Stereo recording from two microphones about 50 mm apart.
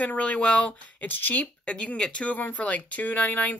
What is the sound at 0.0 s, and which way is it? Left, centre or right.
Speech, left.